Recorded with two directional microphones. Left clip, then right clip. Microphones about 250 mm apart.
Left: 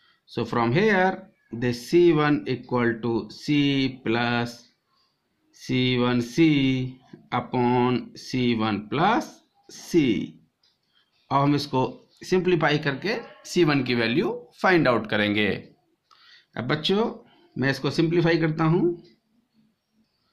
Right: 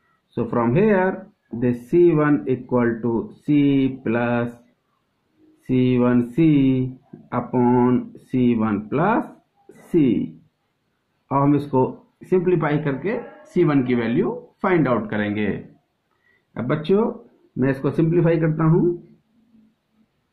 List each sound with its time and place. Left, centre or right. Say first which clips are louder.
0.3 s speech: right 3 dB; left
5.7 s speech: right 4 dB; left
11.2 s speech: right 3 dB; left
16.5 s speech: right 4 dB; left